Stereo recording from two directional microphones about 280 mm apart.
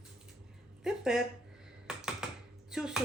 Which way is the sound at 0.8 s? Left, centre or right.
Centre.